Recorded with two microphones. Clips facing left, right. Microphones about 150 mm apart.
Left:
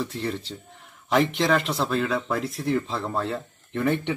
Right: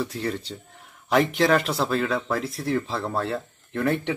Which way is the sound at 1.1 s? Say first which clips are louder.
Right 1 dB; 5° right (ahead or behind).